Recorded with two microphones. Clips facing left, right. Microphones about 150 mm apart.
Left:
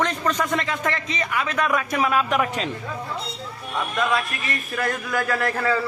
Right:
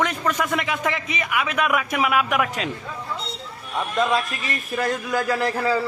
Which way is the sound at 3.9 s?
20° right (ahead or behind).